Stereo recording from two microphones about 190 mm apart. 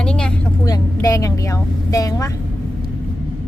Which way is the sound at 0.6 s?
20° left (ahead or behind).